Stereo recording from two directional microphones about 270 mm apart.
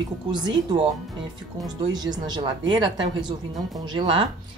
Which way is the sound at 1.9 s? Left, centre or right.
Centre.